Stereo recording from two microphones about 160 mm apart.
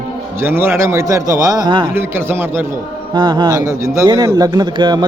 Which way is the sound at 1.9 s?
15° right (ahead or behind).